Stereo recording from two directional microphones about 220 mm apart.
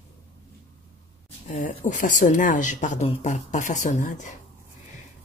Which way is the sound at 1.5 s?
30° left (ahead or behind).